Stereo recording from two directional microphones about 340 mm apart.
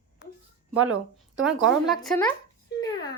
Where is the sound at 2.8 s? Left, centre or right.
Centre.